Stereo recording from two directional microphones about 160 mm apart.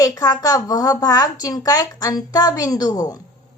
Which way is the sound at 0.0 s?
25° left (ahead or behind).